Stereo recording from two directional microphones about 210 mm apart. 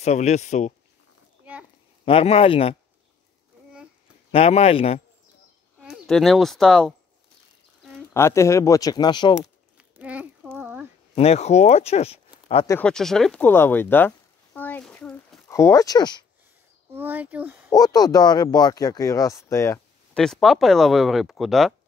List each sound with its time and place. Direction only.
0.0 s speech: 35° left (ahead or behind)
1.4 s a sound: 5° right (ahead or behind)
2.0 s speech: 25° left (ahead or behind)
4.3 s speech: 30° left (ahead or behind)
5.8 s speech: centre (ahead or behind)
8.1 s speech: 15° left (ahead or behind)
9.8 s a sound: 5° right (ahead or behind)
11.1 s speech: 30° left (ahead or behind)
12.6 s speech: 5° left (ahead or behind)
16.9 s speech: 10° right (ahead or behind)
17.7 s speech: 15° left (ahead or behind)
20.2 s speech: centre (ahead or behind)